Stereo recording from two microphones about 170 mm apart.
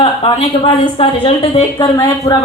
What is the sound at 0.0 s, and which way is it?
A woman's voice, 30° left (ahead or behind).